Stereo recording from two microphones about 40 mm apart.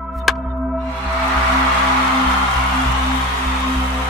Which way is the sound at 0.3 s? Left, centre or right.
Centre.